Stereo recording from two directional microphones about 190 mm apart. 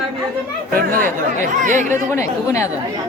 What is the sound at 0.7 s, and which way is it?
A woman's voice, 45° right (ahead or behind).